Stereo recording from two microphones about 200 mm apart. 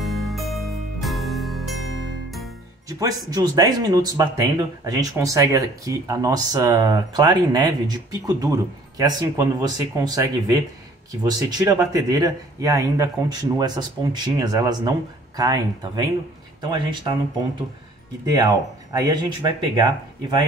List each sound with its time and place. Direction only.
0.0 s music: centre (ahead or behind)
2.9 s speech: 20° right (ahead or behind)
18.2 s speech: 20° right (ahead or behind)